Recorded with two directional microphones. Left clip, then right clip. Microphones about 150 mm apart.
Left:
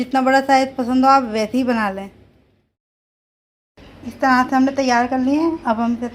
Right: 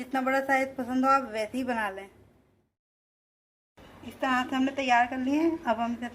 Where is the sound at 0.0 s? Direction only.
15° left (ahead or behind).